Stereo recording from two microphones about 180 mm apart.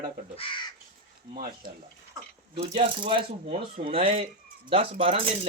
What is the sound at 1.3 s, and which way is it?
Speech, 50° right (ahead or behind).